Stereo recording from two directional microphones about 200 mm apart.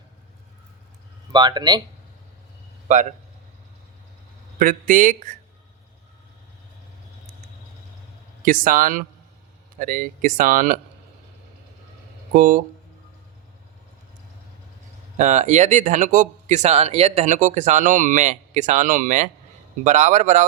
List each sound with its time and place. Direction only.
1.3 s speech: 20° right (ahead or behind)
4.6 s speech: 40° right (ahead or behind)
8.4 s speech: 45° right (ahead or behind)
12.3 s speech: 45° right (ahead or behind)
15.2 s speech: 35° right (ahead or behind)